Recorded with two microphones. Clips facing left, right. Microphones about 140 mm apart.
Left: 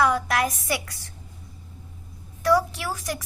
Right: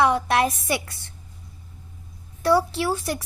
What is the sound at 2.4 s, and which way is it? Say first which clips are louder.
Speech: right 2 dB; 30° right (ahead or behind).